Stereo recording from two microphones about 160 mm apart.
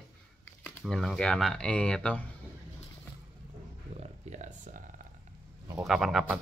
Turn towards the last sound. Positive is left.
turn(degrees=0)  # may be behind; listen again after turning